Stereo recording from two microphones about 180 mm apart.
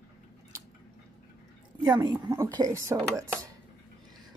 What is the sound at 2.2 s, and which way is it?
Speech, 20° right (ahead or behind).